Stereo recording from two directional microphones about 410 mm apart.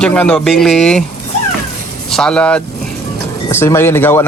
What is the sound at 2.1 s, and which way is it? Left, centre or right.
A man's voice, centre.